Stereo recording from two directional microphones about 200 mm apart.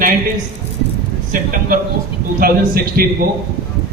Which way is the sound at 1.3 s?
45° right (ahead or behind).